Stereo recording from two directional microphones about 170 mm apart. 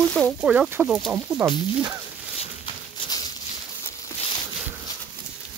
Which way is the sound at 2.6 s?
25° left (ahead or behind).